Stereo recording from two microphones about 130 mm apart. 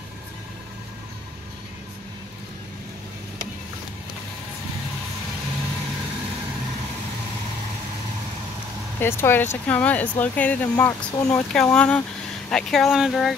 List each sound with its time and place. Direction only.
9.0 s speech: 20° left (ahead or behind); by 13.4 s centre (ahead or behind)